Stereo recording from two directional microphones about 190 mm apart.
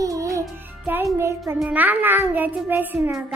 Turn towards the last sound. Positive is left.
turn(degrees=-10)  # may be behind; listen again after turning